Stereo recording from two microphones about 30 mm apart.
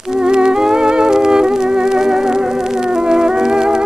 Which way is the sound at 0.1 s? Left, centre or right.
Right.